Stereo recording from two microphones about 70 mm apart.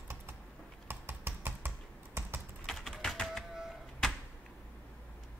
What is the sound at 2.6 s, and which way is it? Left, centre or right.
Typing, centre.